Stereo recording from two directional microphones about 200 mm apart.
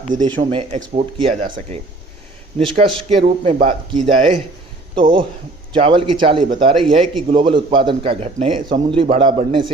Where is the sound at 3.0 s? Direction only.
35° right (ahead or behind).